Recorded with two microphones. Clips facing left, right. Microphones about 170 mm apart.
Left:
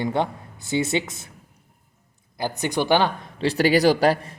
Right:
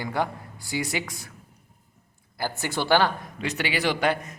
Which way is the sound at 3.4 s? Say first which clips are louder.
Left 9 dB; 35° left (ahead or behind).